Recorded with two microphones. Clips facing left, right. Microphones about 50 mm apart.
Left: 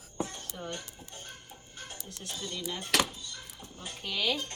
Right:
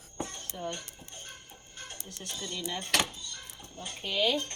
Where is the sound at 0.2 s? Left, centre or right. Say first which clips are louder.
Left 2 dB; centre.